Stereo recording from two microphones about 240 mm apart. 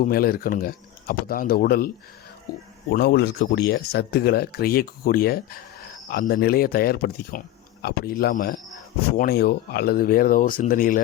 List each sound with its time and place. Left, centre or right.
0.0 s speech: left
2.9 s a man's voice: left